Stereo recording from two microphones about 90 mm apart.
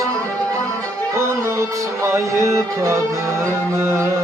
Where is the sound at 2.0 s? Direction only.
30° right (ahead or behind).